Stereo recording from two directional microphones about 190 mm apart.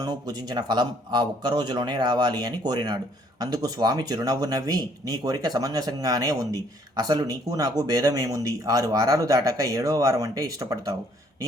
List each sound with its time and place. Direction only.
0.0 s a man's voice: 20° right (ahead or behind)